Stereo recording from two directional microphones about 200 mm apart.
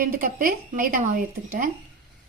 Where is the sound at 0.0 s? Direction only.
45° right (ahead or behind).